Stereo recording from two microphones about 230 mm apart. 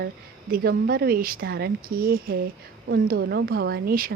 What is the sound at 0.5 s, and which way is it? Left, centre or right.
A woman's voice, right.